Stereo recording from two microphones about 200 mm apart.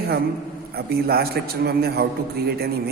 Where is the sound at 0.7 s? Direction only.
50° right (ahead or behind).